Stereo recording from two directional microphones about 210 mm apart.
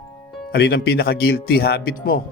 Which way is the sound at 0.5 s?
50° left (ahead or behind).